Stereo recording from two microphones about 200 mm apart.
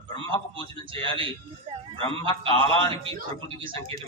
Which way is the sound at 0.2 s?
25° right (ahead or behind).